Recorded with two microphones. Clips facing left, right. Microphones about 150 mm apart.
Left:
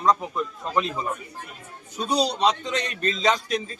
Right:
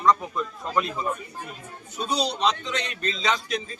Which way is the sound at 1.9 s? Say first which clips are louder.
Left 3 dB; 40° left (ahead or behind).